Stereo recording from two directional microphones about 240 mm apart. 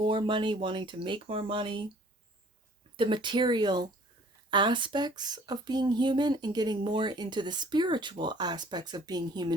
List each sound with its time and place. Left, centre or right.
0.0 s speech: right
2.9 s speech: right